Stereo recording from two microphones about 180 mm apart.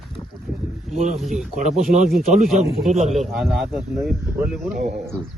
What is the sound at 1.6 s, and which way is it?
Speech, 40° right (ahead or behind).